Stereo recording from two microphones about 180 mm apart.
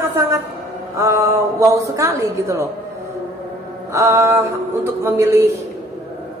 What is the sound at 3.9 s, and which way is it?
Speech, 15° right (ahead or behind).